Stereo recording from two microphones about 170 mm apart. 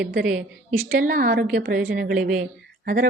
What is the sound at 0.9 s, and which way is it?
A woman's voice, 55° right (ahead or behind).